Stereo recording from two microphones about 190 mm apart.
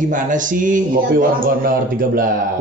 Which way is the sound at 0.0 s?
45° right (ahead or behind).